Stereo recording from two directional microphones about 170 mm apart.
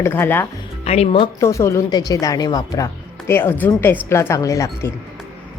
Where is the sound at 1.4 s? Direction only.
20° left (ahead or behind).